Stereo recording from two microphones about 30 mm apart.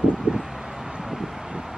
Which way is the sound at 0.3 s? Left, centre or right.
Right.